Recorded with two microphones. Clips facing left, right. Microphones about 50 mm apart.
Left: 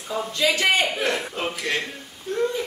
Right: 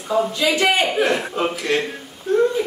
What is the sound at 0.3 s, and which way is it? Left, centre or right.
A man's voice, centre.